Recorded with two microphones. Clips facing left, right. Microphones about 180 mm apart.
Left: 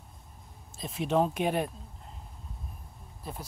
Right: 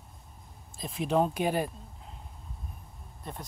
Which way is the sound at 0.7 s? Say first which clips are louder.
Even; centre (ahead or behind).